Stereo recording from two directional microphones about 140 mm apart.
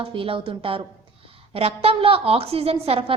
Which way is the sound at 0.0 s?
40° right (ahead or behind).